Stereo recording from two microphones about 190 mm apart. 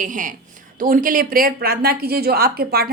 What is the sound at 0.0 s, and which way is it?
A woman's voice, 45° right (ahead or behind).